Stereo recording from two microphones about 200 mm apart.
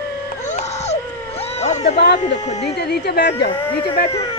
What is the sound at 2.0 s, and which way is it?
A woman's voice, 60° left (ahead or behind).